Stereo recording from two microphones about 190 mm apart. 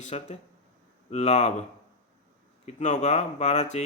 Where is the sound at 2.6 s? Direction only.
40° left (ahead or behind).